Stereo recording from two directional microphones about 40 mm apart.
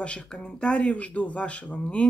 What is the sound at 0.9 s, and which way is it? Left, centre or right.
Speech, left.